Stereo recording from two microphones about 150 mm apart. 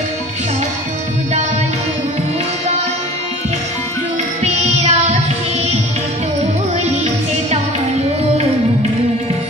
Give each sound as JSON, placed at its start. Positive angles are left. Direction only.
{"t": 4.4, "sound": "music", "side_deg": -50}